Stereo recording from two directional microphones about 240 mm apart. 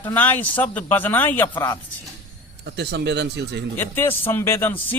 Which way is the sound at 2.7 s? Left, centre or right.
Right.